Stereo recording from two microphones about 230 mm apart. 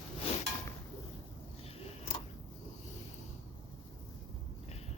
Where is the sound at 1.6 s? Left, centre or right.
Centre.